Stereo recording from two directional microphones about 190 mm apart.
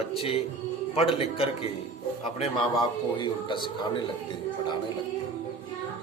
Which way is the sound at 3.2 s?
25° left (ahead or behind).